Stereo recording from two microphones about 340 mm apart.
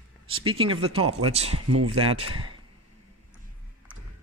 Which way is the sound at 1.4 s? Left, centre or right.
Right.